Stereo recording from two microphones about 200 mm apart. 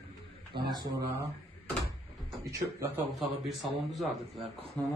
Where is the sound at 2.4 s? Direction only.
15° right (ahead or behind).